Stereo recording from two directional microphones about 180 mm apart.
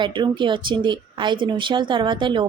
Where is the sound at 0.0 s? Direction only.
25° right (ahead or behind).